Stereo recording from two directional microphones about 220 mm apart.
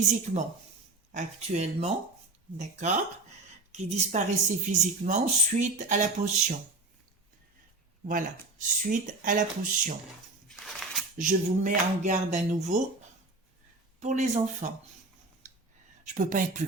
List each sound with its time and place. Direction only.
1.1 s speech: 30° right (ahead or behind)
8.0 s speech: 35° right (ahead or behind)
10.5 s a sound: centre (ahead or behind)
11.2 s speech: 35° right (ahead or behind)
14.0 s speech: 30° right (ahead or behind)
16.0 s speech: 35° right (ahead or behind)